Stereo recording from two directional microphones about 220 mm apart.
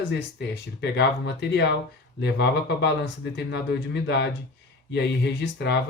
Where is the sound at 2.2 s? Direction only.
50° left (ahead or behind).